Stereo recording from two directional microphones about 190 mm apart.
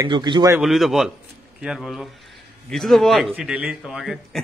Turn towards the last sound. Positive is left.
turn(degrees=0)  # may be behind; listen again after turning